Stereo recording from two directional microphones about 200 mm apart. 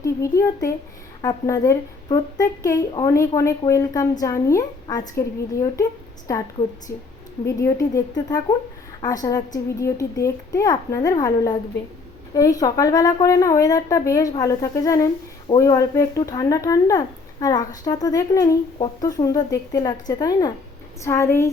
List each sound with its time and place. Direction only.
0.0 s a woman's voice: 15° left (ahead or behind)
6.9 s a woman's voice: 55° left (ahead or behind)
7.4 s a woman's voice: 15° left (ahead or behind)